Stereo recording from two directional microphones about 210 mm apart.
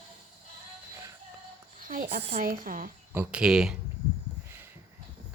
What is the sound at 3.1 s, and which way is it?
Speech, 5° right (ahead or behind).